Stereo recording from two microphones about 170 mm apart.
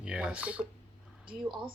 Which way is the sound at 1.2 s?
30° right (ahead or behind).